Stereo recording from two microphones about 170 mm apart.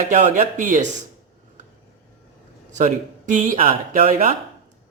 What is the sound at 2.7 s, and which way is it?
Speech, 50° right (ahead or behind).